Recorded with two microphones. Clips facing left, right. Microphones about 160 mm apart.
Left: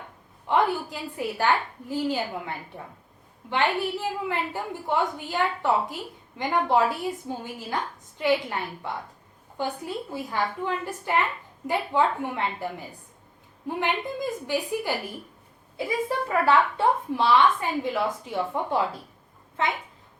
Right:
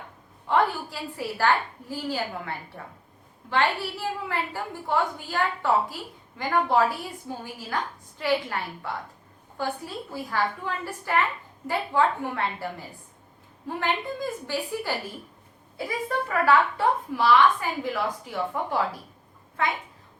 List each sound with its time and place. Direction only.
0.4 s a woman's voice: 20° left (ahead or behind)
13.7 s a woman's voice: 15° left (ahead or behind)
16.0 s a woman's voice: 25° left (ahead or behind)